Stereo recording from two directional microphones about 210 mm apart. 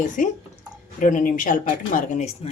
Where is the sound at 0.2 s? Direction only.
40° left (ahead or behind).